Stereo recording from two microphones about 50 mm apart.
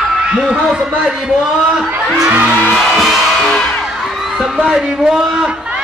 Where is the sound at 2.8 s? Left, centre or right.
Centre.